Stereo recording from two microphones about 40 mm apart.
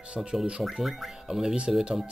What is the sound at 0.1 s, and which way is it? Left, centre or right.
Speech, right.